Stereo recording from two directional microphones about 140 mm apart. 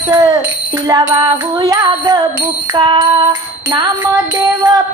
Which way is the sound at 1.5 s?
30° right (ahead or behind).